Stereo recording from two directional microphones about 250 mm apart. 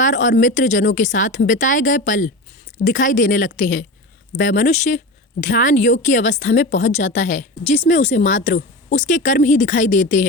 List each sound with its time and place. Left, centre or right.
0.0 s a woman's voice: left